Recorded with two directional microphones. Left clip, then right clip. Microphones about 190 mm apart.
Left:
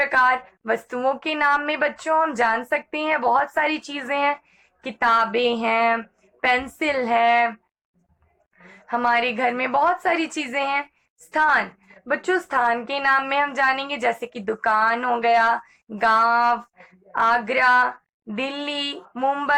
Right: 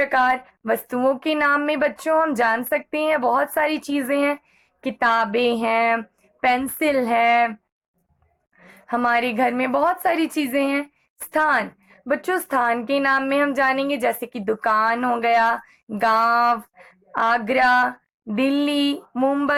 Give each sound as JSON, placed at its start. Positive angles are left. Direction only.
{"t": 0.0, "sound": "a woman's voice", "side_deg": -40}
{"t": 8.6, "sound": "a woman's voice", "side_deg": -45}